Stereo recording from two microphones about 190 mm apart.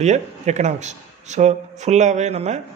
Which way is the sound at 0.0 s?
40° right (ahead or behind).